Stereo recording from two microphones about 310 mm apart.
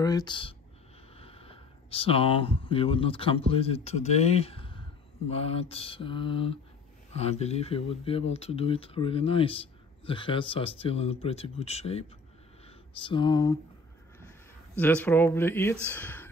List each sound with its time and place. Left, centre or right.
0.0 s speech: centre
5.3 s mantra: centre
7.1 s speech: centre
14.8 s mantra: centre